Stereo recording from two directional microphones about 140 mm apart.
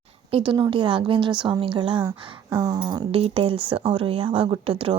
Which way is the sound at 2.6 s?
30° right (ahead or behind).